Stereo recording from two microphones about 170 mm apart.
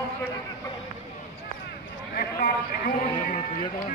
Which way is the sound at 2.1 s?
55° left (ahead or behind).